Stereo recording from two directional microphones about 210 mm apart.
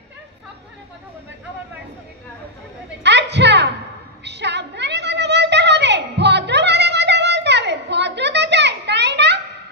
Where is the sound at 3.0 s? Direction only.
55° right (ahead or behind).